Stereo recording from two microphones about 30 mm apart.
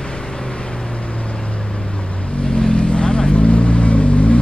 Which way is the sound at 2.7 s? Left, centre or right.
Left.